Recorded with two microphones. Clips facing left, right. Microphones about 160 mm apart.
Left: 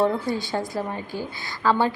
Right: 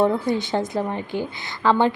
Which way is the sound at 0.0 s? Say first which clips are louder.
Right 3 dB; 20° right (ahead or behind).